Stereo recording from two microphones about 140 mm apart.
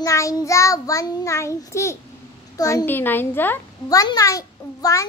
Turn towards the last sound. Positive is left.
turn(degrees=25)  # may be behind; listen again after turning